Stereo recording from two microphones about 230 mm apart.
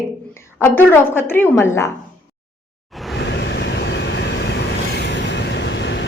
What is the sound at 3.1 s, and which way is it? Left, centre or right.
Vehicle, left.